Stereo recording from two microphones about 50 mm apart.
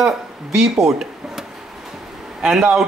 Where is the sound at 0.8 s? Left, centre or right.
Centre.